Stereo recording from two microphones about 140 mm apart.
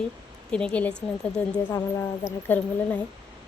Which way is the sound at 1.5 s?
20° left (ahead or behind).